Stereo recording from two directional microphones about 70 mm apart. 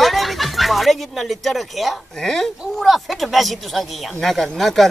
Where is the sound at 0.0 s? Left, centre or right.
Centre.